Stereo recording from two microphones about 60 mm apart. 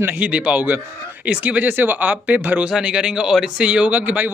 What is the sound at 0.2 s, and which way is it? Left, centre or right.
Speech, right.